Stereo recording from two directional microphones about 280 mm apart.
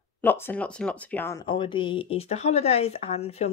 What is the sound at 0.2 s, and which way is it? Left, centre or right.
Speech, centre.